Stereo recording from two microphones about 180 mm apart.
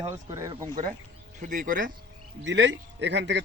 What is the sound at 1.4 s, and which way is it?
Speech, 45° right (ahead or behind).